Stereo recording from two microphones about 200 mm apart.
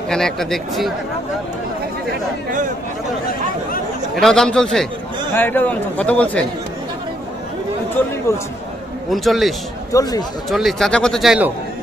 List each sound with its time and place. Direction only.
0.1 s speech: centre (ahead or behind)
4.1 s a man's voice: centre (ahead or behind)
8.3 s a man's voice: 15° left (ahead or behind)
9.1 s speech: centre (ahead or behind)
9.9 s speech: 20° left (ahead or behind)
10.5 s speech: centre (ahead or behind)